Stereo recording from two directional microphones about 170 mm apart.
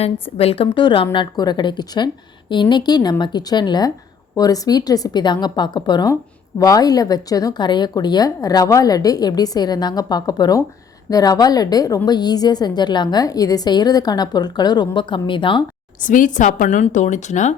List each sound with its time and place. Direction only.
0.0 s a woman's voice: 35° left (ahead or behind)
16.0 s speech: 50° left (ahead or behind)